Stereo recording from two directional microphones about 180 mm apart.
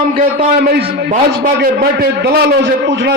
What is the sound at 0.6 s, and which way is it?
A man's voice, 65° right (ahead or behind).